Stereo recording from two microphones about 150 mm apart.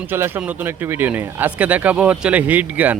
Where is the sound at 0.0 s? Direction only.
15° right (ahead or behind).